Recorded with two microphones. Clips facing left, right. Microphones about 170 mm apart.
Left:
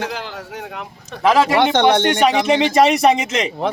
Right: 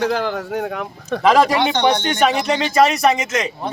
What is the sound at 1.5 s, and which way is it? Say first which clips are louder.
Speech: left 3 dB; 70° left (ahead or behind).